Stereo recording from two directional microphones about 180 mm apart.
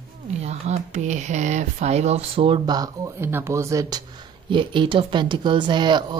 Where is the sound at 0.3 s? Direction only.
40° right (ahead or behind); by 4.0 s 15° right (ahead or behind).